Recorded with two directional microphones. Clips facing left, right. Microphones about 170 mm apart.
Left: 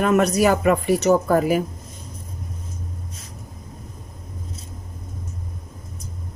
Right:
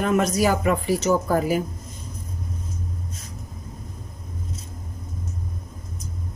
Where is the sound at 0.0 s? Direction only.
65° left (ahead or behind).